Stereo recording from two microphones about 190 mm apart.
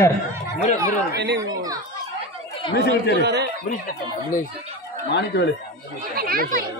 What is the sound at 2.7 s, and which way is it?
Speech, 65° left (ahead or behind).